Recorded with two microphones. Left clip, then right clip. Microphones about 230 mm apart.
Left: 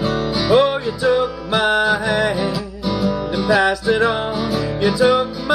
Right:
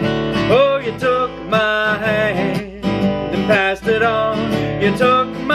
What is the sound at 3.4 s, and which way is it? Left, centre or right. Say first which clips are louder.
Music: even; centre.